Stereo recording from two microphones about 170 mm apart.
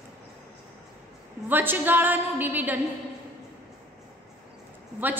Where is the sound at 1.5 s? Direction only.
10° right (ahead or behind).